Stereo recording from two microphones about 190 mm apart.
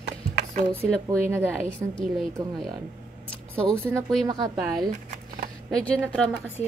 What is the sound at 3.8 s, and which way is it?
Speech, 15° right (ahead or behind).